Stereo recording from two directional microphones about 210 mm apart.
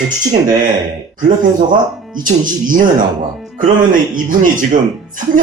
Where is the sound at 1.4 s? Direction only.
40° right (ahead or behind).